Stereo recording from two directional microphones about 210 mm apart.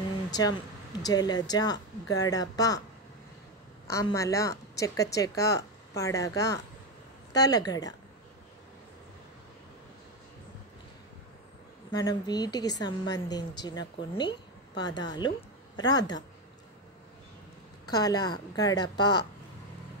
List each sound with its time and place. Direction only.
0.3 s speech: 20° left (ahead or behind)
3.8 s a woman's voice: 15° left (ahead or behind)
11.9 s a woman's voice: 20° left (ahead or behind)
17.8 s a woman's voice: 20° left (ahead or behind)